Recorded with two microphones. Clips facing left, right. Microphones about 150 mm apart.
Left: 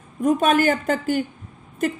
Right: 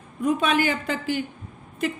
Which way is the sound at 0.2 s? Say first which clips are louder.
Left 4 dB; 45° left (ahead or behind).